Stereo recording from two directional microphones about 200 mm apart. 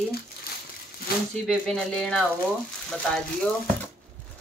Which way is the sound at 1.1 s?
50° left (ahead or behind).